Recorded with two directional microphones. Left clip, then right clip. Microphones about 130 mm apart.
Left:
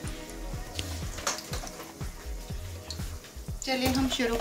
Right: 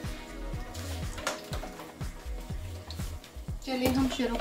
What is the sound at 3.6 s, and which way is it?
Speech, 40° right (ahead or behind).